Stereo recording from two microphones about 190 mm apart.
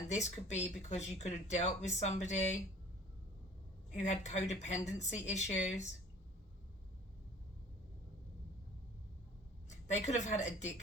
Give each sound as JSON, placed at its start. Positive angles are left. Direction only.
{"t": 0.1, "sound": "speech", "side_deg": 35}
{"t": 3.9, "sound": "speech", "side_deg": 40}
{"t": 9.6, "sound": "a woman's voice", "side_deg": 40}